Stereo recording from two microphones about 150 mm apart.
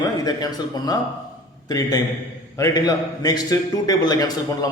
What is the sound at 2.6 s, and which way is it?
A man's voice, 25° left (ahead or behind).